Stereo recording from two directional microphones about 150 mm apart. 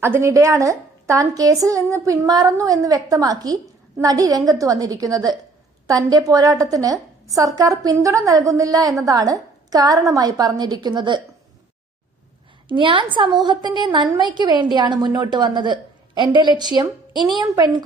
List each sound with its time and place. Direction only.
0.0 s a woman's voice: 15° right (ahead or behind)
12.6 s a woman's voice: 35° right (ahead or behind)